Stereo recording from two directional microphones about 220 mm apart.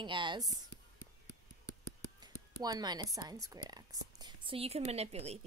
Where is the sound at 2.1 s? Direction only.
20° right (ahead or behind).